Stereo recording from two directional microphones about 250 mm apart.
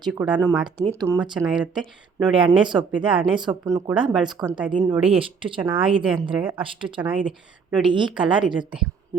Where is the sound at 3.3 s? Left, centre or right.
Centre.